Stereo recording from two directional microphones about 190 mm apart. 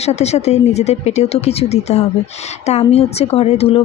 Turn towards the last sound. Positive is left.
turn(degrees=30)  # may be behind; listen again after turning